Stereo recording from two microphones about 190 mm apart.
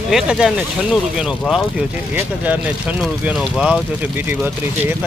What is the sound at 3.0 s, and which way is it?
Speech, 5° right (ahead or behind).